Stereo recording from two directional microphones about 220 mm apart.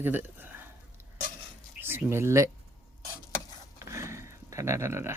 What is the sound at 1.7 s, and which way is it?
Speech, 10° right (ahead or behind).